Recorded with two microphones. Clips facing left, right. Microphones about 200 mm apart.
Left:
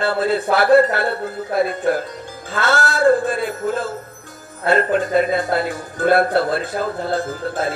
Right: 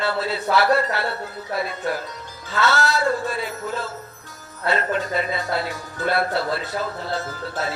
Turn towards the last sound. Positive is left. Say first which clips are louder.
# left 5 dB
turn(degrees=50)  # may be behind; listen again after turning